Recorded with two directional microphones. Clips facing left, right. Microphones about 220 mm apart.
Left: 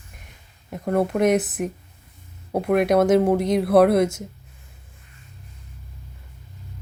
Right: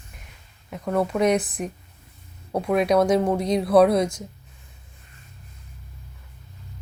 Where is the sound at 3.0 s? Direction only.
5° left (ahead or behind).